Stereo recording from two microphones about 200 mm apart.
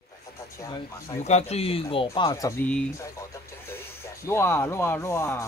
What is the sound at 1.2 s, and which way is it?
Speech, 35° left (ahead or behind).